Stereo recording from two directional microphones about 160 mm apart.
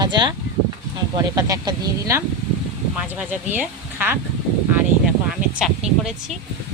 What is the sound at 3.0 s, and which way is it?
Speech, 10° right (ahead or behind).